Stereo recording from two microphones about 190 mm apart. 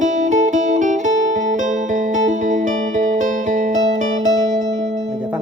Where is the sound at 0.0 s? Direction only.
45° right (ahead or behind).